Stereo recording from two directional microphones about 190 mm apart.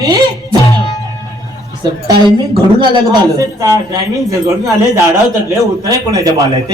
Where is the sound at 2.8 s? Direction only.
25° right (ahead or behind).